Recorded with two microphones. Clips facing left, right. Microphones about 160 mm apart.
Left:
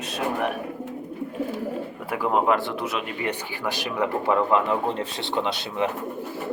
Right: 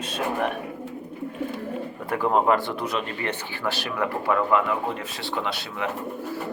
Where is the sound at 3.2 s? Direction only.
15° left (ahead or behind).